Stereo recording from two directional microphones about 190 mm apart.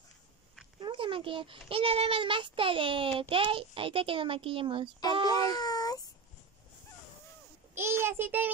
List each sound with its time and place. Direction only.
0.7 s a child's voice: 25° right (ahead or behind)
5.3 s baby cry: 20° left (ahead or behind)
7.7 s a sound: 10° right (ahead or behind)